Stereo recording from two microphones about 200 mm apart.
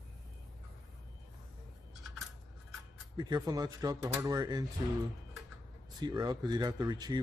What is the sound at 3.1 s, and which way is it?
Speech, 20° right (ahead or behind).